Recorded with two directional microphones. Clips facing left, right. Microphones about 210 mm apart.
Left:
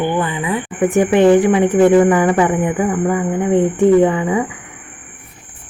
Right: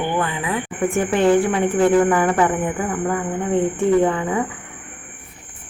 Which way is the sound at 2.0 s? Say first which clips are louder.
Left 4 dB; 10° left (ahead or behind).